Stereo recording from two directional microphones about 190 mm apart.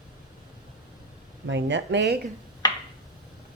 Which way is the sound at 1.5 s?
70° right (ahead or behind).